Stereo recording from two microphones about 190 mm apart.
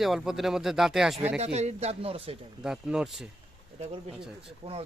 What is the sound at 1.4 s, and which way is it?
Speech, 35° right (ahead or behind).